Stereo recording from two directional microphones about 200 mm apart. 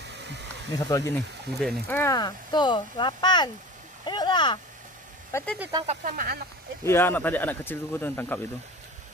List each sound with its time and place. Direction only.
0.1 s a sound: 60° right (ahead or behind)
0.7 s speech: 15° left (ahead or behind)
5.3 s speech: 5° left (ahead or behind)
5.9 s speech: 45° right (ahead or behind)
6.8 s speech: 10° left (ahead or behind)